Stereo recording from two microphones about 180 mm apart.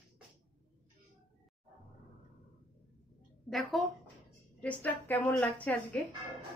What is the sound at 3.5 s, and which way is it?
A woman's voice, centre (ahead or behind).